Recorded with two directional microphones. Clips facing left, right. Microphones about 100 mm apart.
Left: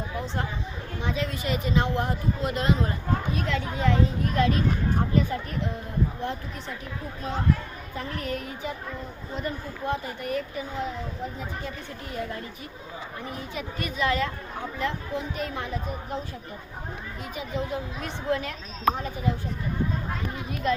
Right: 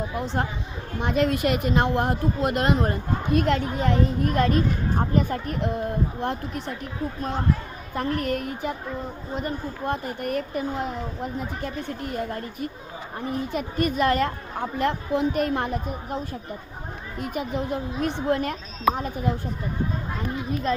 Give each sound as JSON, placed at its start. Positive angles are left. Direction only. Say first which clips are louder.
{"t": 0.9, "sound": "speech", "louder": "right 8 dB", "side_deg": -60}
{"t": 7.9, "sound": "speech", "louder": "right 7 dB", "side_deg": -55}
{"t": 13.5, "sound": "speech", "louder": "right 9 dB", "side_deg": -50}
{"t": 17.2, "sound": "speech", "louder": "right 5 dB", "side_deg": -55}